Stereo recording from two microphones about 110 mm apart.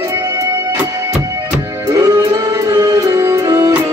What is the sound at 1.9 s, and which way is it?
Music, 20° right (ahead or behind).